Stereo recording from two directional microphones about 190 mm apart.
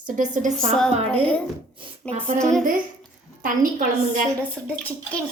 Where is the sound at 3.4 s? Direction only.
45° right (ahead or behind).